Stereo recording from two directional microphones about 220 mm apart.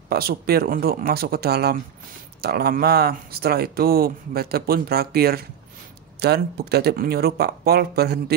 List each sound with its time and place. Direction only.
0.1 s speech: 45° right (ahead or behind)